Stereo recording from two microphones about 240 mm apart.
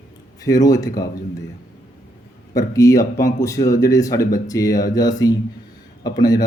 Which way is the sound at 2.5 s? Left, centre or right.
Centre.